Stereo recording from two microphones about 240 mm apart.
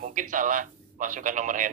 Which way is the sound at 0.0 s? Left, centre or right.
Right.